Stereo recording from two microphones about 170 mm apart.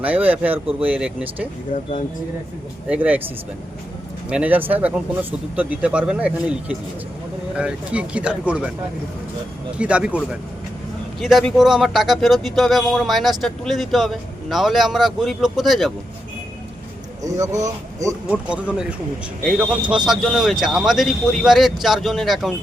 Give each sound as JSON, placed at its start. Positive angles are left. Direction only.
{"t": 0.0, "sound": "speech", "side_deg": -10}
{"t": 1.7, "sound": "speech", "side_deg": 45}
{"t": 2.9, "sound": "speech", "side_deg": -10}
{"t": 4.3, "sound": "speech", "side_deg": -10}
{"t": 9.7, "sound": "speech", "side_deg": -5}
{"t": 17.2, "sound": "speech", "side_deg": -20}
{"t": 18.3, "sound": "speech", "side_deg": -5}
{"t": 20.1, "sound": "speech", "side_deg": 0}